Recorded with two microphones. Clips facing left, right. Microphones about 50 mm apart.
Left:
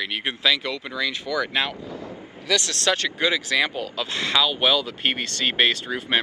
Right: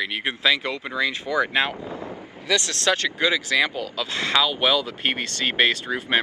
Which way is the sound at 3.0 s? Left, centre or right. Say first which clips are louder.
Right 1 dB; left.